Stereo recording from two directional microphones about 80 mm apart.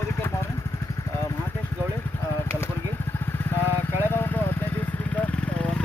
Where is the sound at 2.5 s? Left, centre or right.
Left.